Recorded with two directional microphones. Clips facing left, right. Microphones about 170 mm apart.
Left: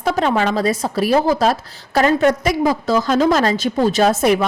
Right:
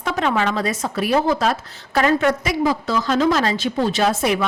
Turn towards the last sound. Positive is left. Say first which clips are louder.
# left 4 dB
turn(degrees=40)  # may be behind; listen again after turning